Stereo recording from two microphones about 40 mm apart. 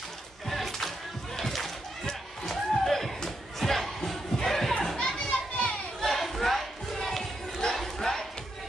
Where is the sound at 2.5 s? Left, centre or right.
Centre.